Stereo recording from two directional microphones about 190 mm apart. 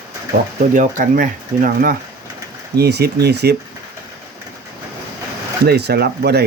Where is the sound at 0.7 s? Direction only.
45° right (ahead or behind).